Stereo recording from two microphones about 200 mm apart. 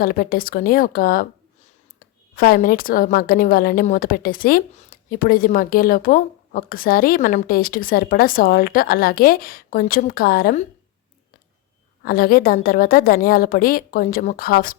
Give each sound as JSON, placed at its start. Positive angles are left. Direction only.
{"t": 0.0, "sound": "a woman's voice", "side_deg": 45}
{"t": 2.3, "sound": "a woman's voice", "side_deg": 45}
{"t": 12.0, "sound": "a woman's voice", "side_deg": 45}